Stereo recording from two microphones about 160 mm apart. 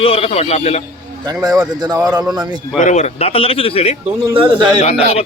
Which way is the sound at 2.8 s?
45° left (ahead or behind).